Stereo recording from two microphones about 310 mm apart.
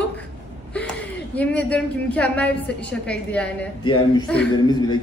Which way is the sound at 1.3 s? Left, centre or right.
Centre.